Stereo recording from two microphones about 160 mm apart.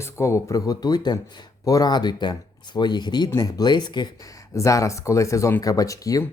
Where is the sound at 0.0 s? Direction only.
15° left (ahead or behind).